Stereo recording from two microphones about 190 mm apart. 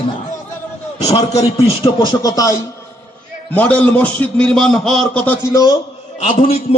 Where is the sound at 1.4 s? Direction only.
30° left (ahead or behind); by 5.7 s 15° left (ahead or behind).